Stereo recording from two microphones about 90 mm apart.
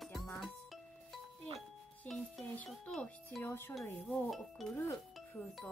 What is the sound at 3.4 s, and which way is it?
Music, 25° left (ahead or behind).